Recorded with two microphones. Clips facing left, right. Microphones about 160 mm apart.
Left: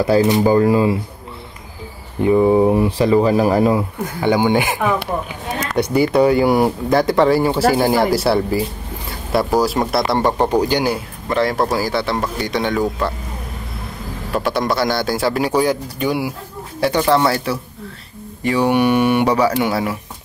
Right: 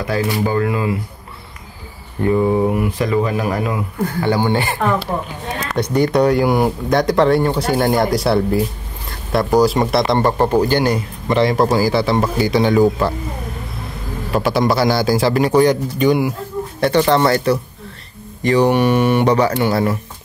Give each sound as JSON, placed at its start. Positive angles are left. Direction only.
{"t": 0.0, "sound": "speech", "side_deg": 30}
{"t": 2.2, "sound": "speech", "side_deg": 15}
{"t": 4.2, "sound": "speech", "side_deg": 15}
{"t": 14.3, "sound": "speech", "side_deg": 0}